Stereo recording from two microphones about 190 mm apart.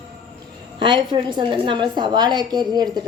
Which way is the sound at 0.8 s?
25° right (ahead or behind).